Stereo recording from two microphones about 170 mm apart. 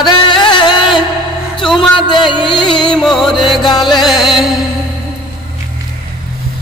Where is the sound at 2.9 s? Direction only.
Centre (ahead or behind).